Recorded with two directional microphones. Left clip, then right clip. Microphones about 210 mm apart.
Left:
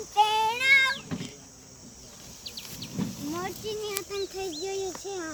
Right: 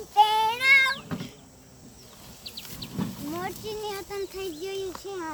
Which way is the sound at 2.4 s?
55° right (ahead or behind).